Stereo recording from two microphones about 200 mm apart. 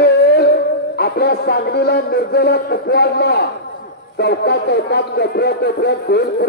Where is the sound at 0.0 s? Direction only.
55° left (ahead or behind).